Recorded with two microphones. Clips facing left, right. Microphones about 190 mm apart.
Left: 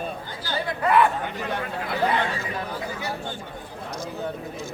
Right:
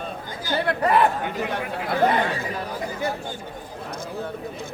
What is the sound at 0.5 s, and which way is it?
Chatter, 65° right (ahead or behind).